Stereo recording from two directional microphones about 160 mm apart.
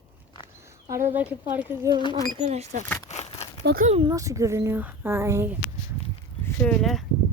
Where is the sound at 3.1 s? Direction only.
45° left (ahead or behind).